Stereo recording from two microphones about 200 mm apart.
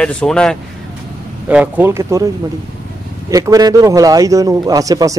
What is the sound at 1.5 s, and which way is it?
Speech, 5° right (ahead or behind).